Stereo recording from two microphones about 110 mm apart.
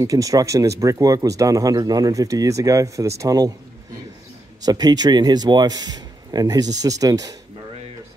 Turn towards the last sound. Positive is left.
turn(degrees=-35)  # may be behind; listen again after turning